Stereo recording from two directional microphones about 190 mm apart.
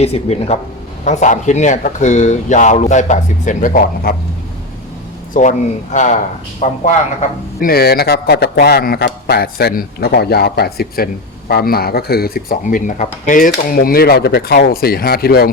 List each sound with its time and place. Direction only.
0.0 s speech: 35° left (ahead or behind)
5.3 s a man's voice: 40° left (ahead or behind)